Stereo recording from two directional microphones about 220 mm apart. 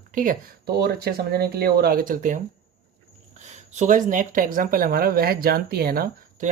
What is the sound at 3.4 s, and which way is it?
Speech, 35° right (ahead or behind).